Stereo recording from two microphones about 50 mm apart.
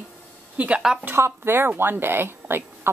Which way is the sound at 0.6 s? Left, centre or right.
Right.